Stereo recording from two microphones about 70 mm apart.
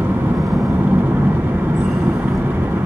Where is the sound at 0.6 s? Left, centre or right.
Right.